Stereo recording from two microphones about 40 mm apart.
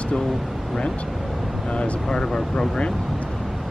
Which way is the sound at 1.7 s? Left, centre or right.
Left.